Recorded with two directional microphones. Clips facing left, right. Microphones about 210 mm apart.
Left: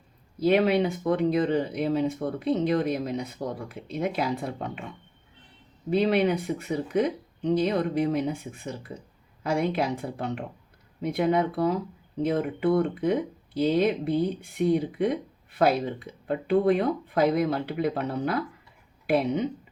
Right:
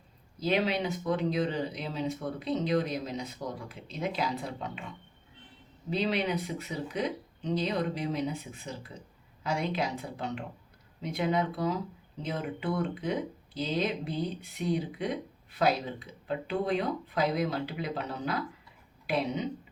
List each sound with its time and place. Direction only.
0.3 s speech: 55° left (ahead or behind)
5.9 s speech: 55° left (ahead or behind)